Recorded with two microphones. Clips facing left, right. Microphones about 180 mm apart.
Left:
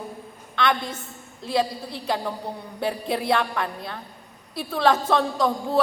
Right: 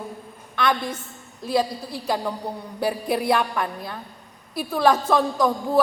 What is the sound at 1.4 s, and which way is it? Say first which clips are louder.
A woman's voice: right 1 dB; 25° left (ahead or behind).